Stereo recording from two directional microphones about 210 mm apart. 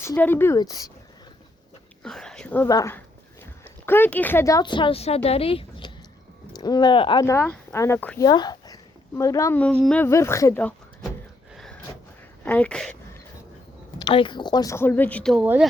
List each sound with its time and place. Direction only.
0.0 s speech: 10° left (ahead or behind)
2.0 s speech: 5° left (ahead or behind)
8.2 s speech: 20° left (ahead or behind)
12.5 s speech: 5° left (ahead or behind)
14.0 s speech: 25° left (ahead or behind); by 15.6 s 5° right (ahead or behind)